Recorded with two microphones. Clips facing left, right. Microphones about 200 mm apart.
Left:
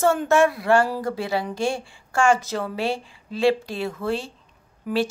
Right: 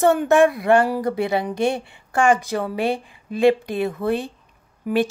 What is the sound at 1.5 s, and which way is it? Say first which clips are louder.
Speech: right 4 dB; 60° right (ahead or behind).